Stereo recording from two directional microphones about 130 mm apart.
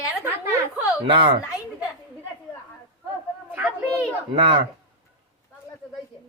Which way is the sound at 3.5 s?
10° right (ahead or behind).